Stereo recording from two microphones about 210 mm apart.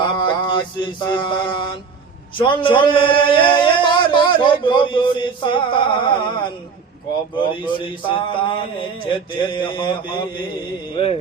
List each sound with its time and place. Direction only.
0.0 s mantra: 20° left (ahead or behind)
2.4 s speech: 25° left (ahead or behind)
7.3 s mantra: 25° left (ahead or behind)